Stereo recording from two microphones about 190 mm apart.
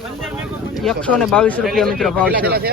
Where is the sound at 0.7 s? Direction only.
Centre (ahead or behind).